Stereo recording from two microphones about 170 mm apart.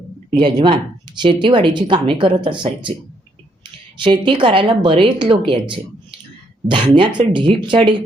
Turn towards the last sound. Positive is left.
turn(degrees=-30)  # may be behind; listen again after turning